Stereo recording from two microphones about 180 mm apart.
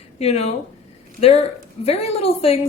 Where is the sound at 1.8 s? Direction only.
35° left (ahead or behind).